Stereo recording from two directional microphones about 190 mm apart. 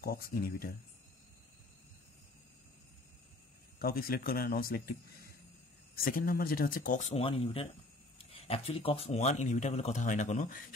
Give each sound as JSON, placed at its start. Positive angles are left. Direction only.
{"t": 0.0, "sound": "speech", "side_deg": 50}
{"t": 3.8, "sound": "speech", "side_deg": 50}